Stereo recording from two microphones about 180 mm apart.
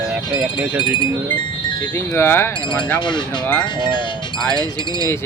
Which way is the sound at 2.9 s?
25° left (ahead or behind).